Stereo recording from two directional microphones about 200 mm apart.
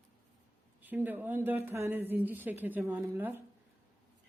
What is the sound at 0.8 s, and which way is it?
A woman's voice, 10° right (ahead or behind).